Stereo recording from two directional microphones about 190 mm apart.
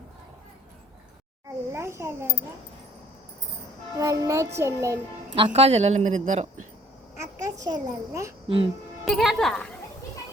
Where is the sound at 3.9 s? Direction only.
20° right (ahead or behind).